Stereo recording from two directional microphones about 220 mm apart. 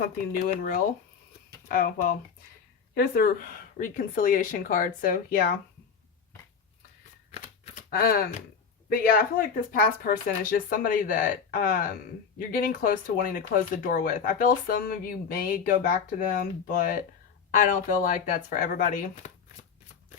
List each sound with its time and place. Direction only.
0.0 s speech: 40° left (ahead or behind)
7.3 s shuffling cards: 30° left (ahead or behind)
7.9 s speech: 45° left (ahead or behind)